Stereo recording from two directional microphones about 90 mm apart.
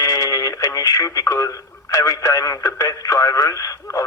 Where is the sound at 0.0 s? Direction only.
40° left (ahead or behind).